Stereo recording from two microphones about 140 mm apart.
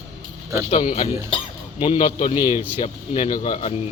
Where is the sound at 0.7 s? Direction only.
50° left (ahead or behind).